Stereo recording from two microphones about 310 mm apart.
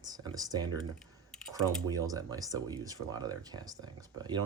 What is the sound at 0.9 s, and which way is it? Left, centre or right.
Computer keyboard, centre.